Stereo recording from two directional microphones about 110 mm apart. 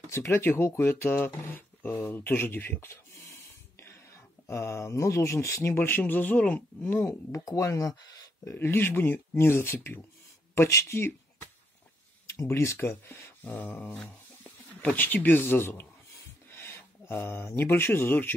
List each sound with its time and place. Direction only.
0.1 s speech: 20° left (ahead or behind)
7.1 s speech: 30° left (ahead or behind)
8.5 s speech: 20° left (ahead or behind)
13.4 s a sound: 15° left (ahead or behind)
14.0 s speech: 15° left (ahead or behind)